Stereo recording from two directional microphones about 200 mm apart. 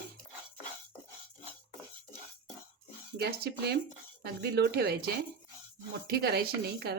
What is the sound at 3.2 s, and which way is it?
Speech, 55° right (ahead or behind).